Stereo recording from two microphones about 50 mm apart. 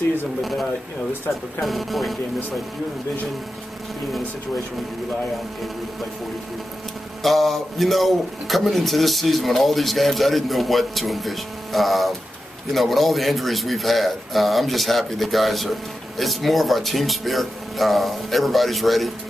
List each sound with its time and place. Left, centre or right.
0.4 s a man's voice: centre
7.2 s a man's voice: centre